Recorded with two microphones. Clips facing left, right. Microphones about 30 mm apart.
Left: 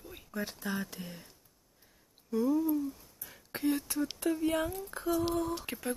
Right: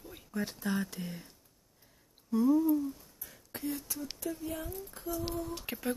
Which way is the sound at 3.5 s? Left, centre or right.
Left.